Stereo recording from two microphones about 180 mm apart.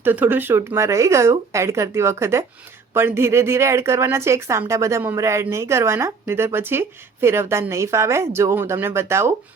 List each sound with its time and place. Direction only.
0.0 s a woman's voice: 10° right (ahead or behind)